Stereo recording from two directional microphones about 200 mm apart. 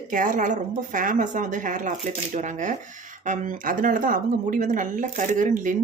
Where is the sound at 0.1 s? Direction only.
40° right (ahead or behind).